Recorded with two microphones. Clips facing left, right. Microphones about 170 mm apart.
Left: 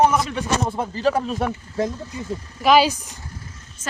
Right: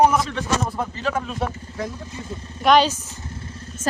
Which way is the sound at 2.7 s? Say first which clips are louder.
Left 1 dB; 5° left (ahead or behind).